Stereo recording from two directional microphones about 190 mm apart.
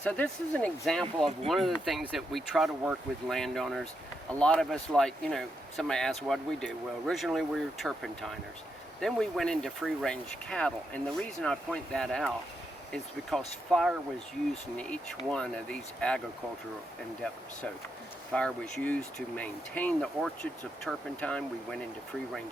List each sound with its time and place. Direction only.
0.0 s speech: 5° left (ahead or behind)
13.3 s speech: centre (ahead or behind)
18.3 s speech: 5° left (ahead or behind)